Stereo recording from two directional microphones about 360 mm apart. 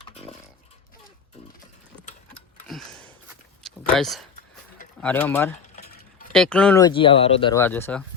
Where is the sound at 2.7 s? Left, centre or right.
Centre.